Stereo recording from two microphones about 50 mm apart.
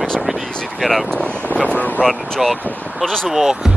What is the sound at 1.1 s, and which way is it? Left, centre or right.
Speech, left.